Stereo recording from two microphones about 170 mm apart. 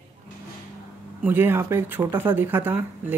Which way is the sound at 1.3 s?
15° right (ahead or behind).